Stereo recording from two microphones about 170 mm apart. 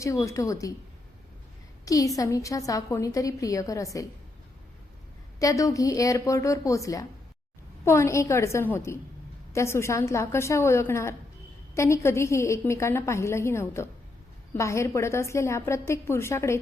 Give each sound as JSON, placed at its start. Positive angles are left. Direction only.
{"t": 0.0, "sound": "a woman's voice", "side_deg": 20}
{"t": 1.8, "sound": "a woman's voice", "side_deg": 20}
{"t": 5.4, "sound": "a woman's voice", "side_deg": 20}